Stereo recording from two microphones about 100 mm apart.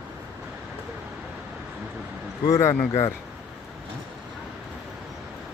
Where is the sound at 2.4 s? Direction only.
25° left (ahead or behind).